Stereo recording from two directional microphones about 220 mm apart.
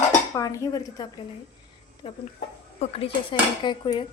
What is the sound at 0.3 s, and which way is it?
Speech, 15° left (ahead or behind).